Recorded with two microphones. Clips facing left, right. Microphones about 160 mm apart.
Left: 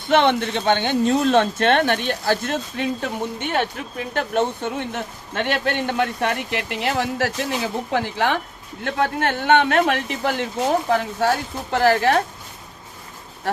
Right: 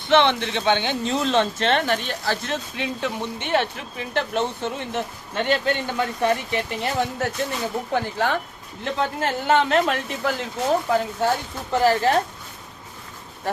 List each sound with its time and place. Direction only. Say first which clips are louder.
0.1 s speech: left 1 dB; 45° left (ahead or behind); by 12.1 s 70° left (ahead or behind)